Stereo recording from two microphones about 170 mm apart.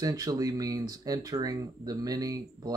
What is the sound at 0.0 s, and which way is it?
Speech, 20° right (ahead or behind).